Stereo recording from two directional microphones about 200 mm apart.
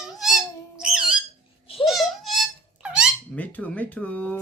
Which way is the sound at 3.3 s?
10° left (ahead or behind).